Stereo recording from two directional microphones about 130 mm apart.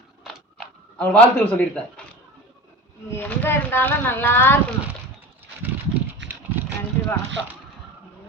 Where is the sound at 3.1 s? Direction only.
15° left (ahead or behind).